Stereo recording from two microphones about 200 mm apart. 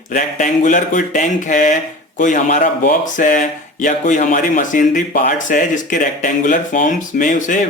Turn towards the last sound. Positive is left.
turn(degrees=40)  # may be behind; listen again after turning